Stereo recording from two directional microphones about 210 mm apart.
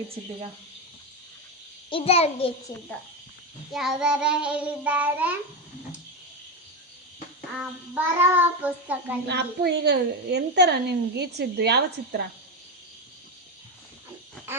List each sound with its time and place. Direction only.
1.9 s a child's voice: 25° left (ahead or behind)
2.7 s speech: 15° left (ahead or behind)
3.7 s child singing: centre (ahead or behind)
7.6 s child singing: 10° right (ahead or behind)
9.2 s a woman's voice: 50° right (ahead or behind)